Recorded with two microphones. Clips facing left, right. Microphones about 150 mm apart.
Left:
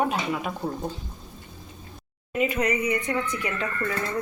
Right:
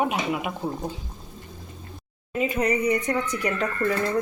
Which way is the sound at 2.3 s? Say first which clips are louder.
Right 1 dB; 30° right (ahead or behind).